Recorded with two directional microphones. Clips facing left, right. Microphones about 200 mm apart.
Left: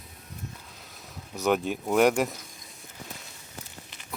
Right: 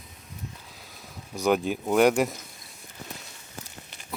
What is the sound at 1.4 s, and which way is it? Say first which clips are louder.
Speech: right 2 dB; centre (ahead or behind).